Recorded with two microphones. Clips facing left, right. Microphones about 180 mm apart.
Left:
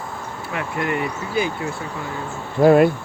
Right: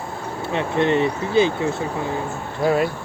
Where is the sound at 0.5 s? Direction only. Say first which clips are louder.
Right 5 dB; 25° right (ahead or behind).